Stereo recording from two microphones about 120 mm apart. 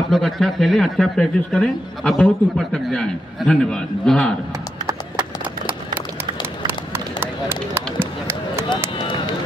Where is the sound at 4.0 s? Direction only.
5° left (ahead or behind).